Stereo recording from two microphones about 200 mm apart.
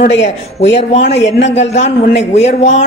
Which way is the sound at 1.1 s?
65° left (ahead or behind).